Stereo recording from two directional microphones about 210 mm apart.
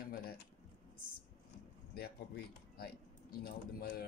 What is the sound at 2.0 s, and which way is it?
Speech, 50° left (ahead or behind).